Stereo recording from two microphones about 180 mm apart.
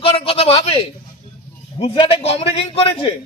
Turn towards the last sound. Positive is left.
turn(degrees=30)  # may be behind; listen again after turning